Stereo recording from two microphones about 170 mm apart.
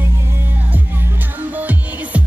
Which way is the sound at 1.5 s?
10° right (ahead or behind).